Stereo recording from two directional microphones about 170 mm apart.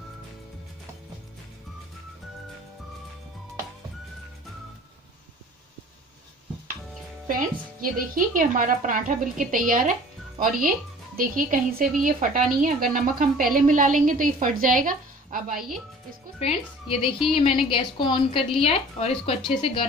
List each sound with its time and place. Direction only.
7.2 s a woman's voice: 55° right (ahead or behind)
16.3 s a woman's voice: 35° left (ahead or behind)